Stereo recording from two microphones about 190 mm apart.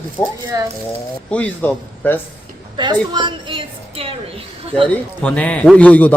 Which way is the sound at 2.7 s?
25° right (ahead or behind).